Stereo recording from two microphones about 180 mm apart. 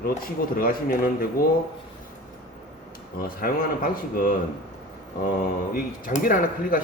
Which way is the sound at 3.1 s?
55° left (ahead or behind).